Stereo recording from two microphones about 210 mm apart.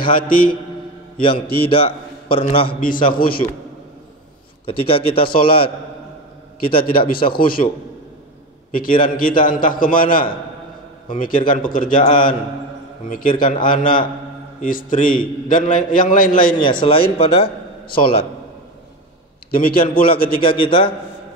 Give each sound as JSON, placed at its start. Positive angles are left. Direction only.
{"t": 0.1, "sound": "a man's voice", "side_deg": 40}
{"t": 1.2, "sound": "a man's voice", "side_deg": 25}
{"t": 2.8, "sound": "a man's voice", "side_deg": 40}
{"t": 4.6, "sound": "a man's voice", "side_deg": 25}
{"t": 6.7, "sound": "a man's voice", "side_deg": 25}
{"t": 7.2, "sound": "a man's voice", "side_deg": 45}
{"t": 8.7, "sound": "a man's voice", "side_deg": 40}
{"t": 16.8, "sound": "a man's voice", "side_deg": 25}
{"t": 19.9, "sound": "a man's voice", "side_deg": 25}
{"t": 20.2, "sound": "a man's voice", "side_deg": 45}
{"t": 20.4, "sound": "a man's voice", "side_deg": 25}